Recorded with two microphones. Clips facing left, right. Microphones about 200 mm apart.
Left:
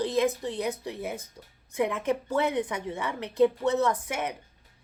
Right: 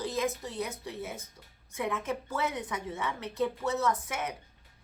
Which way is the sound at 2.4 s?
30° left (ahead or behind).